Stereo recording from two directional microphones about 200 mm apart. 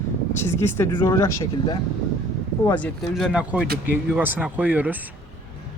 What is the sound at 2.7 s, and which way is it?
Speech, 5° left (ahead or behind).